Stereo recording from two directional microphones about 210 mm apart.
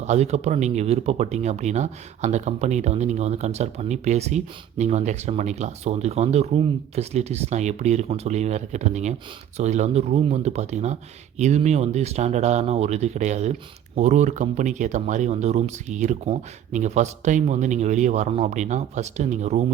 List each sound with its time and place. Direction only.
0.0 s speech: 30° right (ahead or behind)